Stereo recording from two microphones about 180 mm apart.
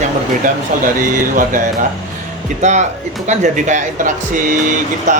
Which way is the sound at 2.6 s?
40° right (ahead or behind).